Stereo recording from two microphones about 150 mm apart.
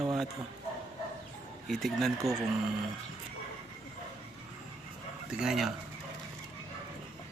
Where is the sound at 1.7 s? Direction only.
Centre (ahead or behind).